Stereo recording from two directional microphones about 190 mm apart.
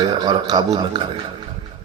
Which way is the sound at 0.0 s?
20° right (ahead or behind).